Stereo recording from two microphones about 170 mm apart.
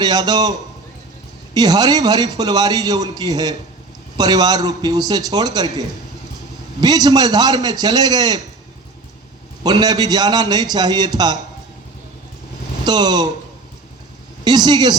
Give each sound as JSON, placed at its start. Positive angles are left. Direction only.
{"t": 0.0, "sound": "a man's voice", "side_deg": -25}
{"t": 1.5, "sound": "a man's voice", "side_deg": -25}
{"t": 6.8, "sound": "a man's voice", "side_deg": -25}
{"t": 9.6, "sound": "a man's voice", "side_deg": -25}
{"t": 12.8, "sound": "speech", "side_deg": -25}
{"t": 14.4, "sound": "a man's voice", "side_deg": -25}